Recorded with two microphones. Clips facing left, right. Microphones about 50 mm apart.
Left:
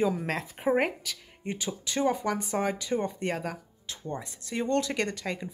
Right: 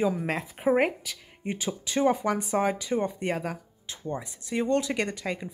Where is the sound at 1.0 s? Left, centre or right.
Right.